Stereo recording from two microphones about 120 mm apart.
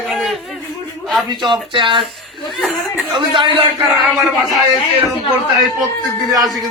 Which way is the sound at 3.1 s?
45° right (ahead or behind).